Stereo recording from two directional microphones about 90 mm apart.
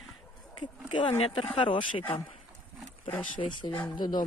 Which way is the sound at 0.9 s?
75° left (ahead or behind).